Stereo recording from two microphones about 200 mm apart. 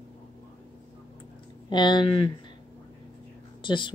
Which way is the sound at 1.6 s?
20° left (ahead or behind).